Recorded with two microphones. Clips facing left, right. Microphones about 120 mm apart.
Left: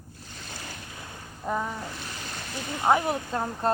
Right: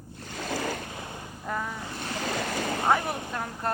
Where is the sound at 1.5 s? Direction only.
15° left (ahead or behind).